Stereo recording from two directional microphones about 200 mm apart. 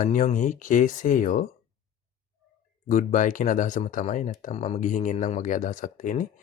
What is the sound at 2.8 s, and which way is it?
Speech, 40° left (ahead or behind).